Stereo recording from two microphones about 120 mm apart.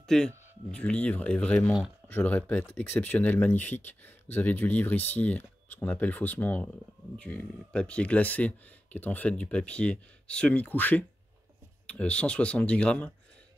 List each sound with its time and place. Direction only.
0.0 s speech: 5° left (ahead or behind)